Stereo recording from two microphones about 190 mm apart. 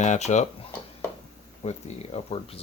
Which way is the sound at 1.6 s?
35° left (ahead or behind).